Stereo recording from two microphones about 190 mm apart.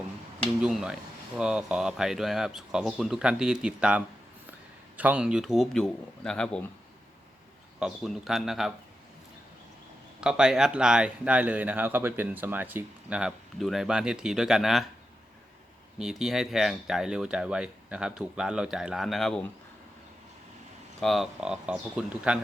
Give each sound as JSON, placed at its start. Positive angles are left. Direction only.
{"t": 0.6, "sound": "speech", "side_deg": -5}
{"t": 7.8, "sound": "speech", "side_deg": -5}
{"t": 10.2, "sound": "speech", "side_deg": -5}
{"t": 16.0, "sound": "speech", "side_deg": -5}
{"t": 21.0, "sound": "speech", "side_deg": 0}